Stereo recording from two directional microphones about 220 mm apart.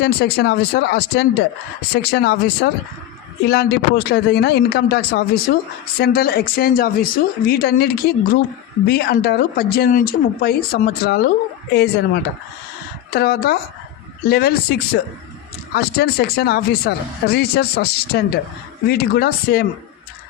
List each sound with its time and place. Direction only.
0.0 s speech: 45° left (ahead or behind)